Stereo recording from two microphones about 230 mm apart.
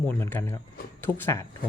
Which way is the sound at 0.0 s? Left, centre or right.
Centre.